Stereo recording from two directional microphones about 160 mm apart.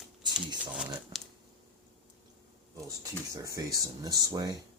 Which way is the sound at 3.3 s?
20° right (ahead or behind).